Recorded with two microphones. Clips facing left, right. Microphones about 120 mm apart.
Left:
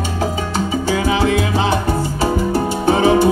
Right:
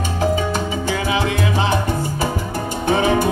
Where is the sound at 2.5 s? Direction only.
40° left (ahead or behind).